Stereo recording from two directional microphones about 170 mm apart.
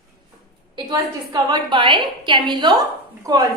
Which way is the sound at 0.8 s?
25° right (ahead or behind).